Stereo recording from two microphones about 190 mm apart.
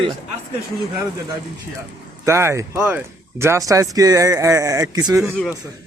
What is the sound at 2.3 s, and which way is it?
Speech, 15° right (ahead or behind).